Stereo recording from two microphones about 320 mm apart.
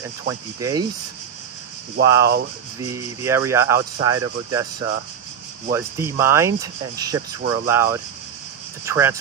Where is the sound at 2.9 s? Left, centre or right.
Centre.